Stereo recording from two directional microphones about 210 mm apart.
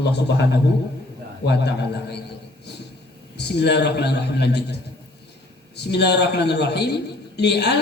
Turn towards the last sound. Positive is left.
turn(degrees=55)  # may be behind; listen again after turning